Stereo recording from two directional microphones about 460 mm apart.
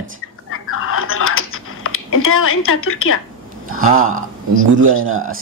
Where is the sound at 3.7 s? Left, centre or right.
Right.